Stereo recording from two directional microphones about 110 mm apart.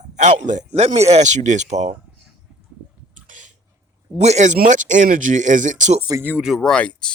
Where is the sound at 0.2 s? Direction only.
90° right.